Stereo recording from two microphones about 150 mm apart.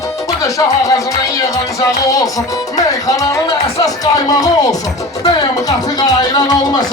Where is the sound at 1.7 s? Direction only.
25° left (ahead or behind).